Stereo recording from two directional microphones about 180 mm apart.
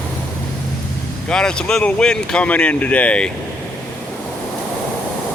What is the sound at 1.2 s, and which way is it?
Speech, 5° left (ahead or behind).